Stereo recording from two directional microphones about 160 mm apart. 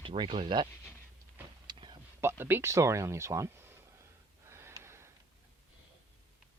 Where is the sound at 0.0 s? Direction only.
35° right (ahead or behind).